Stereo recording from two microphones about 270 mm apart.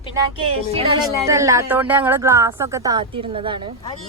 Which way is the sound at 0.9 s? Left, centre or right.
Centre.